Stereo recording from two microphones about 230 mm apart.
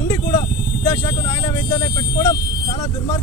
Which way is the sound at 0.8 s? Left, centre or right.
Centre.